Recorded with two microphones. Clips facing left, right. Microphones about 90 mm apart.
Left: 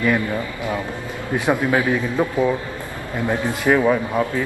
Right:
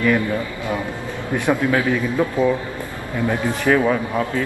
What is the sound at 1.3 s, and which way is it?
Speech, 15° left (ahead or behind).